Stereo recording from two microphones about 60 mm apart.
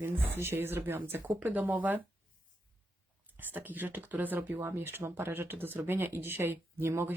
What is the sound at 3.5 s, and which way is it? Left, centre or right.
Speech, right.